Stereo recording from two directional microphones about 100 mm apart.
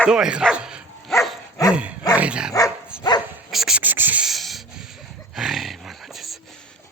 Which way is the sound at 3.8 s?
20° right (ahead or behind).